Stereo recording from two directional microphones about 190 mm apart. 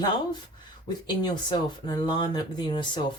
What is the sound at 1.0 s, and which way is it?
Speech, 25° left (ahead or behind).